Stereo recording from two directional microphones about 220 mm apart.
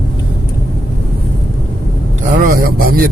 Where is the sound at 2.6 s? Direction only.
40° right (ahead or behind).